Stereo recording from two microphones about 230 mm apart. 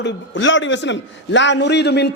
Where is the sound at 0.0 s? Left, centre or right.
Left.